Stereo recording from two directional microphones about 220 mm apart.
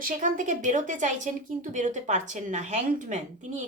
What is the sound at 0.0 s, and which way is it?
A woman's voice, 35° right (ahead or behind).